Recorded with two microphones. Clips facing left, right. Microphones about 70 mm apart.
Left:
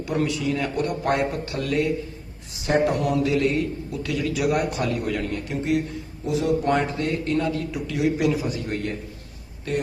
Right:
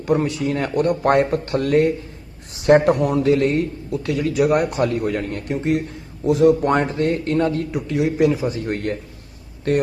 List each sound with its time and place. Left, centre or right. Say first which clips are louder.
0.2 s speech: right 3 dB; right
2.5 s speech: right 8 dB; right
2.9 s a man's voice: right 5 dB; right
8.7 s speech: right 4 dB; right